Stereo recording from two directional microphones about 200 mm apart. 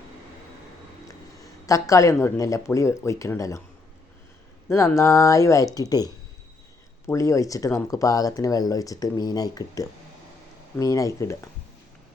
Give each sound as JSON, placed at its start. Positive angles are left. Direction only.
{"t": 1.6, "sound": "speech", "side_deg": 15}
{"t": 4.7, "sound": "speech", "side_deg": 15}
{"t": 7.1, "sound": "speech", "side_deg": 15}